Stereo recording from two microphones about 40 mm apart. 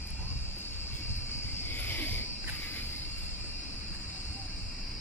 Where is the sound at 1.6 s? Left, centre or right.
Left.